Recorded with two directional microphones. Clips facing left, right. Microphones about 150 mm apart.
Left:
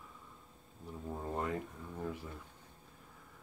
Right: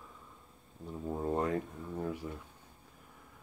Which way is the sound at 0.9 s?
20° right (ahead or behind).